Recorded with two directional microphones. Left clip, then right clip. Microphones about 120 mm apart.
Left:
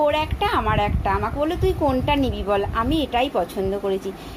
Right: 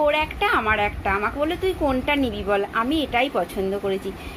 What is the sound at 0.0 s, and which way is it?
A woman's voice, 20° left (ahead or behind).